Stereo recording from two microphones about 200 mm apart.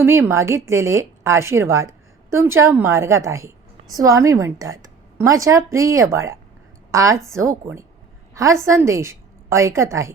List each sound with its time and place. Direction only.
0.0 s a woman's voice: 10° right (ahead or behind)